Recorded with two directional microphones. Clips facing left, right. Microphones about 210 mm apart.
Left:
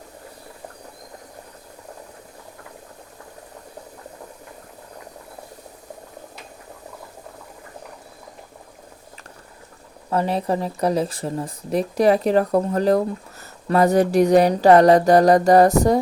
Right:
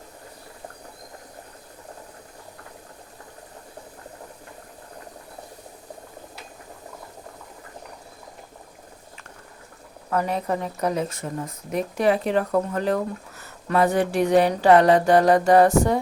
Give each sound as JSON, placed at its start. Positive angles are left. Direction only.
{"t": 10.1, "sound": "speech", "side_deg": 30}